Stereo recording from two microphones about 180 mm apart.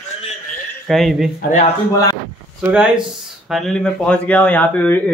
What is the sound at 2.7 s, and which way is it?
Speech, 5° right (ahead or behind).